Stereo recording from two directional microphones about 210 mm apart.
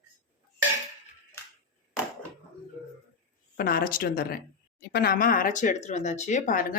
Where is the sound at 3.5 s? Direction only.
45° left (ahead or behind).